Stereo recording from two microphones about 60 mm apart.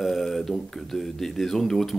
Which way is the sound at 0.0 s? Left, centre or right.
Centre.